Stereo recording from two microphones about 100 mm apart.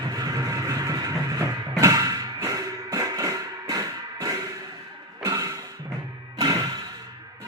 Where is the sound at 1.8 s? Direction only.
35° right (ahead or behind).